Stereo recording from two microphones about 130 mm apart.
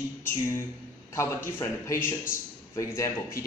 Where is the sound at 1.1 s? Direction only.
20° left (ahead or behind).